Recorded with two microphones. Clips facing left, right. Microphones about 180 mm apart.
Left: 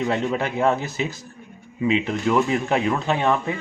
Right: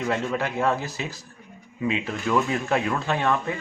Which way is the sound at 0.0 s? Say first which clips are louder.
Left 3 dB; 20° left (ahead or behind).